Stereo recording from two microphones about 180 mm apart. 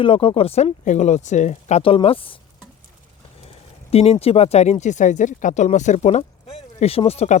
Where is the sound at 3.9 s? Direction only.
35° left (ahead or behind).